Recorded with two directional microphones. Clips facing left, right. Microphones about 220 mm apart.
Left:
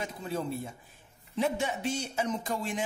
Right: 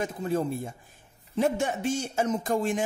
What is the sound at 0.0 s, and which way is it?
A man's voice, 45° right (ahead or behind).